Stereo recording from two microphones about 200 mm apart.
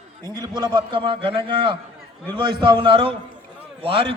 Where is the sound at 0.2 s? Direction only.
20° right (ahead or behind).